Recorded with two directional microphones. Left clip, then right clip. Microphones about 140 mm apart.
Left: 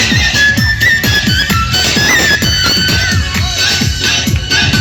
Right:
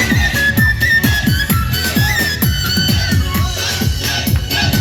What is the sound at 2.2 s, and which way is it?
Music, 65° right (ahead or behind).